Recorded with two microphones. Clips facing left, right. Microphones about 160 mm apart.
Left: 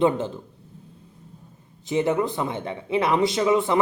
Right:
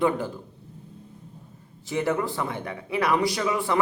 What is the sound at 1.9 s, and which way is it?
Speech, 20° left (ahead or behind).